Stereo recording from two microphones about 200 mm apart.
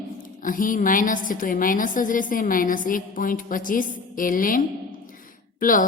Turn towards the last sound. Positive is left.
turn(degrees=40)  # may be behind; listen again after turning